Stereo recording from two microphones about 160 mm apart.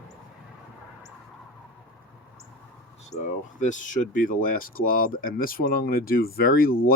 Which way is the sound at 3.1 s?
45° left (ahead or behind).